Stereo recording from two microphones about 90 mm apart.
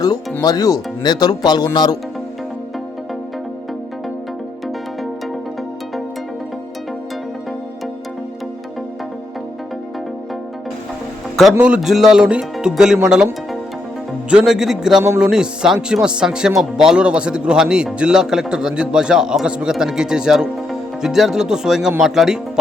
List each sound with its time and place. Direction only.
0.4 s speech: 45° left (ahead or behind)
11.5 s a man's voice: 15° right (ahead or behind)
11.8 s a man's voice: 5° right (ahead or behind)
14.3 s a man's voice: 10° right (ahead or behind)